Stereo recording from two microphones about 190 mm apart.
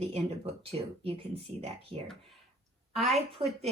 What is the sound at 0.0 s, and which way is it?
Speech, 35° right (ahead or behind).